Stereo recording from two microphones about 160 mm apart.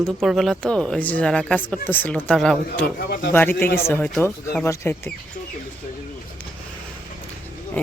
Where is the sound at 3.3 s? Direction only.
15° left (ahead or behind).